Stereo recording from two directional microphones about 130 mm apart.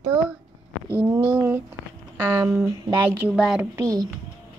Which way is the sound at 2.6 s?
15° right (ahead or behind).